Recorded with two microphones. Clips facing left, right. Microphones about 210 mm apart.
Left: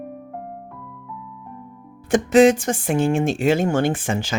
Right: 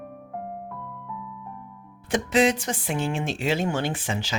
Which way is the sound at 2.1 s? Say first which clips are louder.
Left 8 dB; 50° left (ahead or behind).